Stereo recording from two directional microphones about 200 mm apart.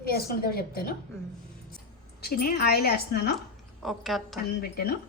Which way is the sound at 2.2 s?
50° left (ahead or behind).